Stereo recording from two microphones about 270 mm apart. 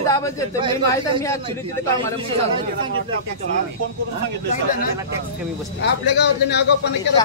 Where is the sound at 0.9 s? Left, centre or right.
Centre.